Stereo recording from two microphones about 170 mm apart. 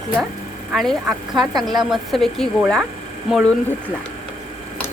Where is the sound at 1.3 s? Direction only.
25° right (ahead or behind).